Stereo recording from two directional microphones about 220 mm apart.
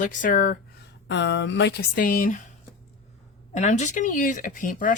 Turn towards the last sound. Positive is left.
turn(degrees=40)  # may be behind; listen again after turning